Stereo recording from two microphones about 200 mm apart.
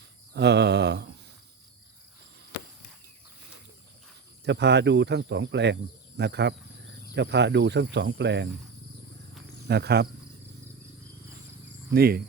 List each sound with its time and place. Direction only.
0.3 s speech: 60° right (ahead or behind)
4.4 s speech: 60° right (ahead or behind)
9.6 s speech: 55° right (ahead or behind)
11.9 s speech: 50° right (ahead or behind)